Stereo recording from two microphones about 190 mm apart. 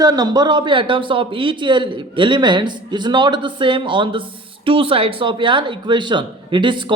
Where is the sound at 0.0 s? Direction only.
20° right (ahead or behind).